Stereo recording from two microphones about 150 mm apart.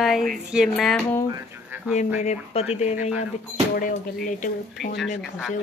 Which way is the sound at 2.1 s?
50° left (ahead or behind).